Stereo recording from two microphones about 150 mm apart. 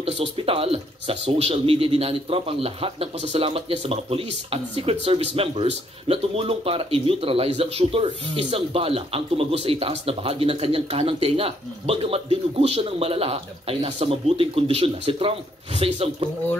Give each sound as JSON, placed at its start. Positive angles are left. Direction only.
{"t": 0.0, "sound": "speech", "side_deg": -40}